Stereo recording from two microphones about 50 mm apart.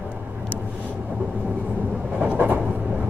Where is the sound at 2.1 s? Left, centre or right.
Right.